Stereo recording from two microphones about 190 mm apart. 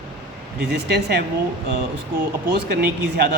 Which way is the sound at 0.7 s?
60° right (ahead or behind).